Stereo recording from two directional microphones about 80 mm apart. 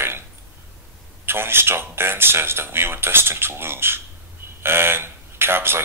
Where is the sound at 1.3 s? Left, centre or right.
Right.